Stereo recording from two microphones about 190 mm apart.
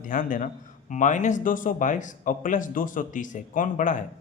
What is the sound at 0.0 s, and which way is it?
Speech, 45° left (ahead or behind).